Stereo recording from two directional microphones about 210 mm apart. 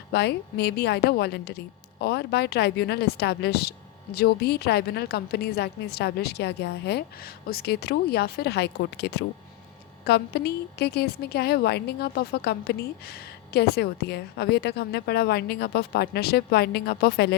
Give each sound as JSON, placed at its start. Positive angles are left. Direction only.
{"t": 0.1, "sound": "a woman's voice", "side_deg": 50}